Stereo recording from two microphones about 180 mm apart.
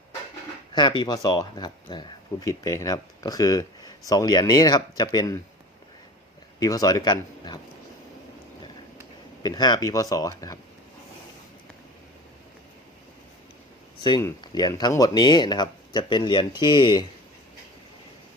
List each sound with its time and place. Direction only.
0.7 s speech: 25° left (ahead or behind)
6.6 s speech: 20° left (ahead or behind)
9.4 s speech: 25° left (ahead or behind)
14.0 s speech: 20° left (ahead or behind)